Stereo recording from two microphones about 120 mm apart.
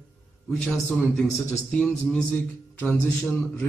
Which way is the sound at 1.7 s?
10° left (ahead or behind).